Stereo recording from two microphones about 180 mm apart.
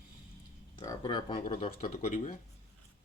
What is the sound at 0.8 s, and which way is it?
Speech, 20° left (ahead or behind).